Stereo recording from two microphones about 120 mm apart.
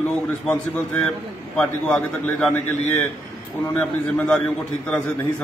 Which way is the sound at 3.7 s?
10° left (ahead or behind).